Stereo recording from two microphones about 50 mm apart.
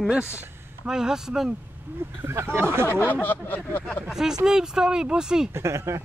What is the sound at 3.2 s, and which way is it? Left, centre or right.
Speech, left.